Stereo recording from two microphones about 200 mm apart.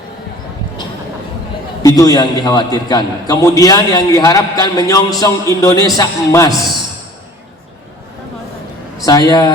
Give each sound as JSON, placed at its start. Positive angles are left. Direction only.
{"t": 1.8, "sound": "a man's voice", "side_deg": 20}
{"t": 9.0, "sound": "a man's voice", "side_deg": 20}